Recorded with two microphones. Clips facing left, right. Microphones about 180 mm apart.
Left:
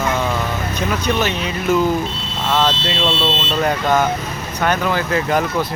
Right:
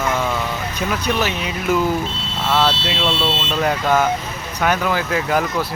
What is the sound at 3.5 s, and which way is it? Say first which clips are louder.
Speech: left 1 dB; 5° right (ahead or behind).